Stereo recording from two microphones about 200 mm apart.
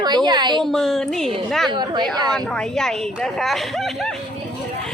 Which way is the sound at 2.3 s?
5° left (ahead or behind).